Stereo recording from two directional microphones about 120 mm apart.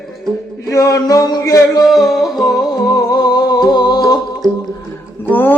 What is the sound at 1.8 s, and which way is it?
Music, centre (ahead or behind).